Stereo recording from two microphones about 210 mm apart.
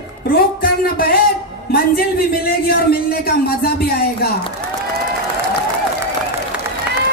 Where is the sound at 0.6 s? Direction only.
45° left (ahead or behind).